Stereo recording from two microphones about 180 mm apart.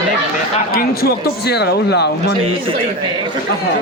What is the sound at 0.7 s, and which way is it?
Speech, 55° left (ahead or behind).